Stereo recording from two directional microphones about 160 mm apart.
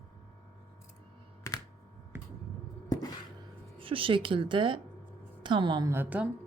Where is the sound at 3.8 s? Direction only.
35° right (ahead or behind).